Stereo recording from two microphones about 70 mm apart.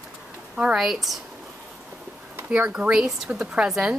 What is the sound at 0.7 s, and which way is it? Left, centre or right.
Speech, centre.